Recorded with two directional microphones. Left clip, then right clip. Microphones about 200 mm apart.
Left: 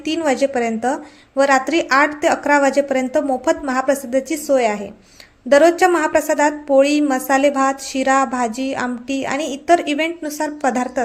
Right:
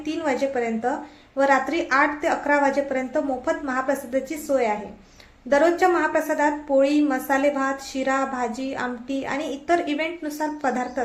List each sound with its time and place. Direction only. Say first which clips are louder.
0.0 s a woman's voice: left 6 dB; 40° left (ahead or behind)